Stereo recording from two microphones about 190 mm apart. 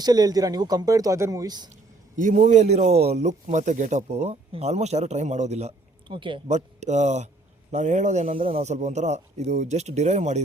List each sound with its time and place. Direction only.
0.0 s speech: 20° right (ahead or behind)
2.1 s a man's voice: 45° right (ahead or behind)